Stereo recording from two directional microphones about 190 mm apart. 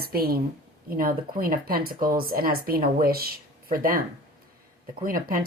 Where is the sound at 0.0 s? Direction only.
55° right (ahead or behind).